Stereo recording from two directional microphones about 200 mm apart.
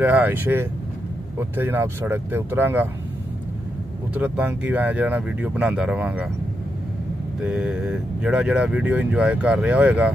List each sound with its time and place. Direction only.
0.0 s speech: 10° right (ahead or behind)
4.1 s speech: 10° right (ahead or behind)
7.4 s speech: 5° right (ahead or behind)